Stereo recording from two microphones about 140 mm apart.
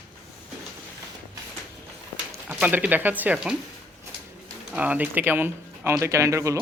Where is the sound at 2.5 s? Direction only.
10° right (ahead or behind).